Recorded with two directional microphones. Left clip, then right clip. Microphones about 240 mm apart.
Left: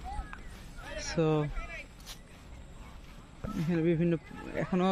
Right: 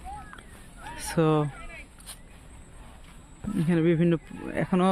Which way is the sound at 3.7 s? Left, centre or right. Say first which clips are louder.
Right 5 dB; right.